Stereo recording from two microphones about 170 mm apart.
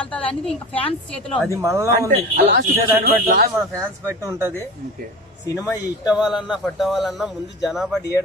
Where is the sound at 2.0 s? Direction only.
65° right (ahead or behind).